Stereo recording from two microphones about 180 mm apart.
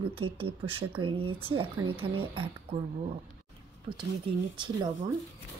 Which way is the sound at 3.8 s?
25° right (ahead or behind).